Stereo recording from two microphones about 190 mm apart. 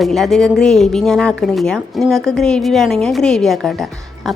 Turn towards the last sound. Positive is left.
turn(degrees=0)  # may be behind; listen again after turning